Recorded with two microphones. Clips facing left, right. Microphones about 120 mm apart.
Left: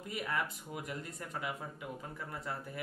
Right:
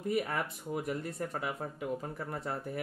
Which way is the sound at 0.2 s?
45° right (ahead or behind).